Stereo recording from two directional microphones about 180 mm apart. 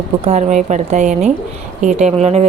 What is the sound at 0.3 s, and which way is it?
A woman's voice, 40° right (ahead or behind).